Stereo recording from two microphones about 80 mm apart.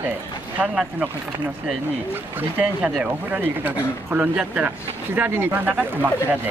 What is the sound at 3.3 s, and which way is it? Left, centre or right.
Speech, right.